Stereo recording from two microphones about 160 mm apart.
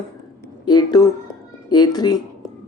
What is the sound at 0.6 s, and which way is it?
Speech, 25° left (ahead or behind).